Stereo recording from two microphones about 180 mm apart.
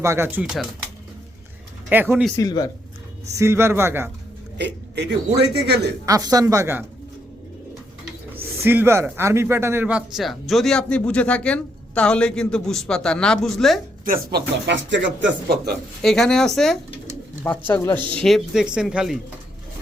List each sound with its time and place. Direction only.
0.0 s a man's voice: 15° right (ahead or behind)
1.9 s a man's voice: 10° right (ahead or behind)
2.3 s speech: 20° left (ahead or behind)
3.3 s a man's voice: 15° right (ahead or behind)
4.5 s speech: 70° right (ahead or behind)
6.1 s a man's voice: 20° right (ahead or behind)
8.6 s speech: 10° right (ahead or behind)
14.0 s speech: 55° right (ahead or behind); by 15.7 s 75° right (ahead or behind)
16.0 s speech: centre (ahead or behind)